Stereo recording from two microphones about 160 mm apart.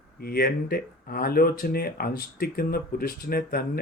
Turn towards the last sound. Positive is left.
turn(degrees=70)  # may be behind; listen again after turning